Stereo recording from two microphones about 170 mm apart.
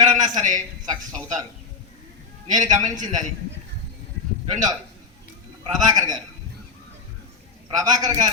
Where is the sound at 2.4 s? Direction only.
45° right (ahead or behind).